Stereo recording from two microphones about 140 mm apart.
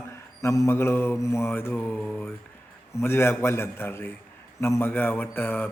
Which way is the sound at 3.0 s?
20° left (ahead or behind).